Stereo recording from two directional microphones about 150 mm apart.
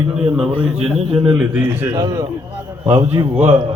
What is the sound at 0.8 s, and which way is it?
A man's voice, 5° right (ahead or behind).